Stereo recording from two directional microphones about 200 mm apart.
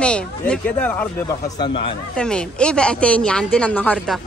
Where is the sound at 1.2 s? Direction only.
25° left (ahead or behind).